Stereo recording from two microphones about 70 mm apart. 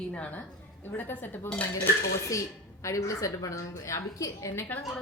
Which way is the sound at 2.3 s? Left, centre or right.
Left.